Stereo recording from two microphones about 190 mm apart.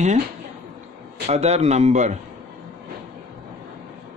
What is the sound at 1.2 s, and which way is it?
Speech, 35° right (ahead or behind).